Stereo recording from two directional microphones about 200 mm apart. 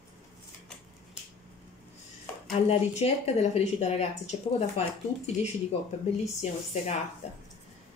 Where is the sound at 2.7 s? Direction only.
30° left (ahead or behind).